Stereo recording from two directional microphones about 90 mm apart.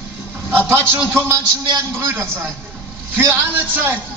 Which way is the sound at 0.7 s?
25° right (ahead or behind).